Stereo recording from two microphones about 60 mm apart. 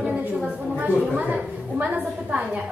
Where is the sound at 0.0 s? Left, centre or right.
Right.